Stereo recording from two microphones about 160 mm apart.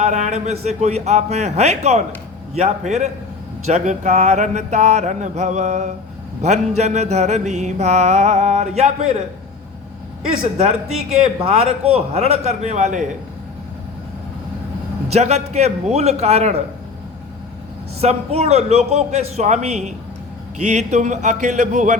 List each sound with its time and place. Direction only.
0.0 s mantra: 45° right (ahead or behind)
10.6 s a man's voice: 40° right (ahead or behind)
15.1 s mantra: 45° right (ahead or behind)
18.0 s mantra: 40° right (ahead or behind)